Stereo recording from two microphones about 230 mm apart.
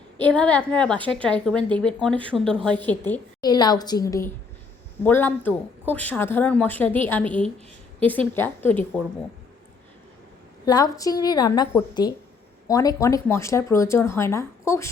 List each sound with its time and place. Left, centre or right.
0.2 s speech: centre
3.1 s speech: centre
10.7 s speech: centre